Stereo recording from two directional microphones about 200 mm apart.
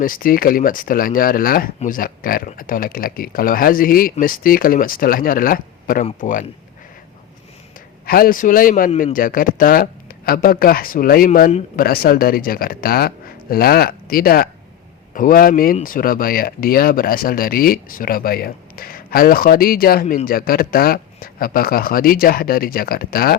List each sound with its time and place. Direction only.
0.0 s a man's voice: 45° left (ahead or behind)
8.0 s speech: 50° left (ahead or behind)
8.9 s a man's voice: 30° left (ahead or behind)
9.1 s speech: 45° left (ahead or behind)